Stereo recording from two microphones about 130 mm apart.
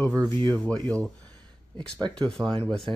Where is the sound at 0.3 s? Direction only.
15° left (ahead or behind).